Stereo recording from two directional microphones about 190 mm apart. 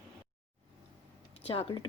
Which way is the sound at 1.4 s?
30° left (ahead or behind).